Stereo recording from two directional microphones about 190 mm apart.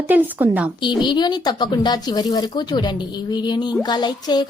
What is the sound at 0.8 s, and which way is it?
Speech, 25° left (ahead or behind).